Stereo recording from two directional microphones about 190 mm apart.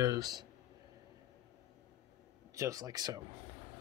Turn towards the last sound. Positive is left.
turn(degrees=-20)  # may be behind; listen again after turning